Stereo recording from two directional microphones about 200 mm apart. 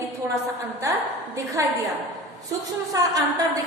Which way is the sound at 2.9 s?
20° right (ahead or behind).